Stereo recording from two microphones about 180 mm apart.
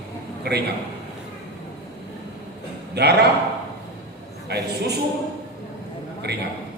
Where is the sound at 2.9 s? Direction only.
65° right (ahead or behind).